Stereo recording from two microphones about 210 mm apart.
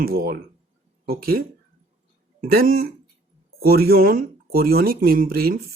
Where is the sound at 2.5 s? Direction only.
45° right (ahead or behind).